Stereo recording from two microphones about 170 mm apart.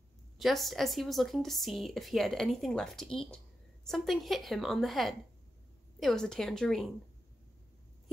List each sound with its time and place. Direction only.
0.4 s speech: centre (ahead or behind)